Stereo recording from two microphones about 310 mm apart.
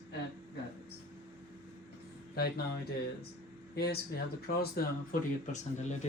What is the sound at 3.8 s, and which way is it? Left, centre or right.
Speech, left.